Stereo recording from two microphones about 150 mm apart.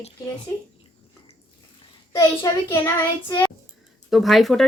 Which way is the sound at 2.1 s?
20° left (ahead or behind).